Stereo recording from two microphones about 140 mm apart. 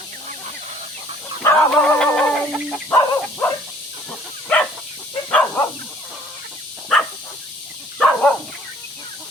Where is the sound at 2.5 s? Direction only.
5° right (ahead or behind).